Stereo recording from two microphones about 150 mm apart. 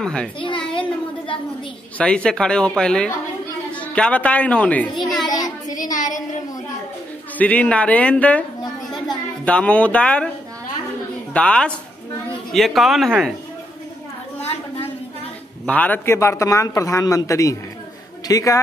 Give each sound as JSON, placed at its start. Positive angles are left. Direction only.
{"t": 0.0, "sound": "speech", "side_deg": 5}
{"t": 0.7, "sound": "a sound", "side_deg": 35}
{"t": 2.0, "sound": "a woman's voice", "side_deg": 5}
{"t": 5.7, "sound": "a woman's voice", "side_deg": 60}
{"t": 7.3, "sound": "a man's voice", "side_deg": 10}
{"t": 11.3, "sound": "a man's voice", "side_deg": 5}
{"t": 15.6, "sound": "a man's voice", "side_deg": 10}